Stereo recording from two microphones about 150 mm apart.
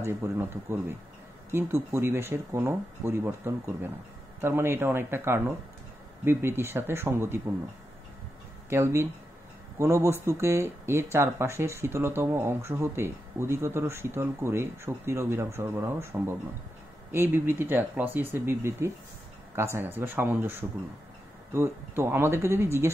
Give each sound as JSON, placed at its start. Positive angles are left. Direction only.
{"t": 0.0, "sound": "speech", "side_deg": -15}
{"t": 8.6, "sound": "speech", "side_deg": -15}